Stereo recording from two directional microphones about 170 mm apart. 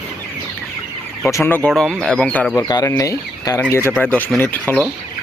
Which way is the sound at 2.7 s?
20° left (ahead or behind).